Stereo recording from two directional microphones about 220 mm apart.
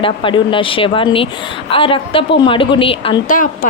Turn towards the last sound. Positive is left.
turn(degrees=40)  # may be behind; listen again after turning